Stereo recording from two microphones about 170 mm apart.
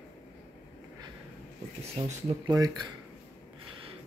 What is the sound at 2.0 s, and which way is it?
Speech, 30° right (ahead or behind).